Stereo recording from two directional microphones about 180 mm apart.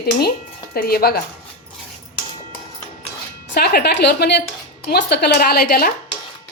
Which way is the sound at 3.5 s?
60° left (ahead or behind).